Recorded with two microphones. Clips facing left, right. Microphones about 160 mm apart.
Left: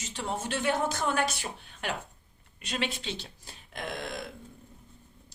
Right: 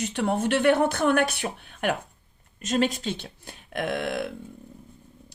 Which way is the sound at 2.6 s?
45° right (ahead or behind).